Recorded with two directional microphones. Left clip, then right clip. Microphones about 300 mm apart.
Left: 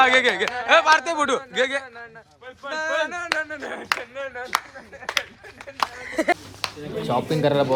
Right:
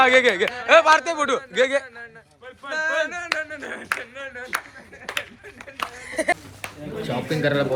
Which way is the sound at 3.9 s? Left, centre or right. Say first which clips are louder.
Left 3 dB; left.